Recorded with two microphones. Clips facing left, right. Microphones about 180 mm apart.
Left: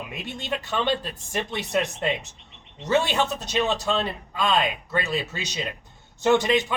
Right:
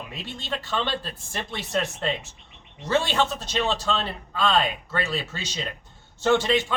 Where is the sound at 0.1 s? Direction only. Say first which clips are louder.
Left 2 dB; 15° left (ahead or behind).